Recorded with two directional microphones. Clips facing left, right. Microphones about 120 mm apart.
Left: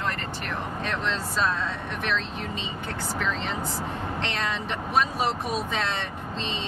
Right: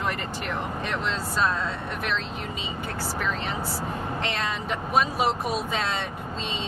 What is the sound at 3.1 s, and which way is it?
Speech, 5° right (ahead or behind).